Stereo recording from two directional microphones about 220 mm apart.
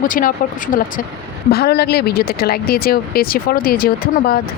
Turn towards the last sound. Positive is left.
turn(degrees=40)  # may be behind; listen again after turning